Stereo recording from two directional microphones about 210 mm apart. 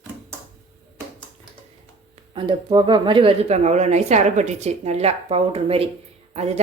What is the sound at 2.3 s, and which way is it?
Speech, 25° right (ahead or behind).